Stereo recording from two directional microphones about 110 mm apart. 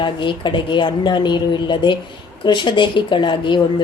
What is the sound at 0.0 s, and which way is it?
Speech, 45° left (ahead or behind).